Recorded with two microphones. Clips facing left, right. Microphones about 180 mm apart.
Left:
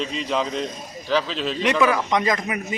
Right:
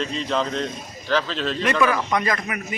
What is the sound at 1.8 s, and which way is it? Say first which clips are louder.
Speech: left 1 dB; 15° left (ahead or behind).